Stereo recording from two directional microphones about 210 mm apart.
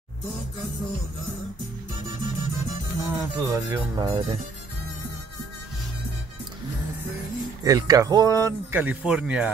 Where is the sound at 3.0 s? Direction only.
15° right (ahead or behind).